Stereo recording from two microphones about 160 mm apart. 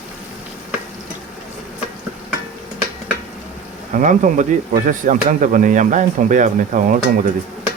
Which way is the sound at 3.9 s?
55° right (ahead or behind).